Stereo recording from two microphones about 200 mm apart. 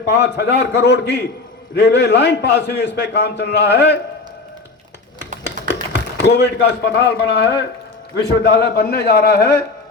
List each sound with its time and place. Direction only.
0.3 s a man's voice: 55° left (ahead or behind)
5.2 s typing: 55° left (ahead or behind)
8.1 s a man's voice: 55° left (ahead or behind)